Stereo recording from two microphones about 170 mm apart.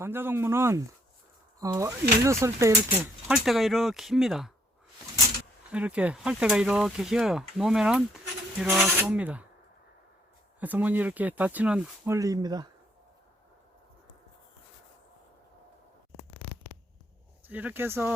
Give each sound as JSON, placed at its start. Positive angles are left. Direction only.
{"t": 0.0, "sound": "speech", "side_deg": -15}
{"t": 3.2, "sound": "speech", "side_deg": 0}
{"t": 5.7, "sound": "speech", "side_deg": -5}
{"t": 10.6, "sound": "speech", "side_deg": -10}
{"t": 12.1, "sound": "speech", "side_deg": -20}
{"t": 17.5, "sound": "speech", "side_deg": -10}